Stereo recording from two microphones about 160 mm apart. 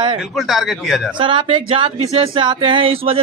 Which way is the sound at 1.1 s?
30° right (ahead or behind).